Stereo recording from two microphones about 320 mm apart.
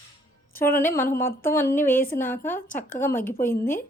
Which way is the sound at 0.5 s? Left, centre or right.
Left.